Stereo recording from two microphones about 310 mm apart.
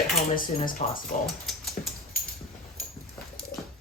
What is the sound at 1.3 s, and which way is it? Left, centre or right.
Dog, centre.